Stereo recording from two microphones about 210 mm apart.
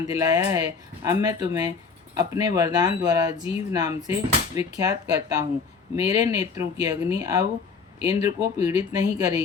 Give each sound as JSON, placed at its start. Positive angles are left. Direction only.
{"t": 0.1, "sound": "speech", "side_deg": -15}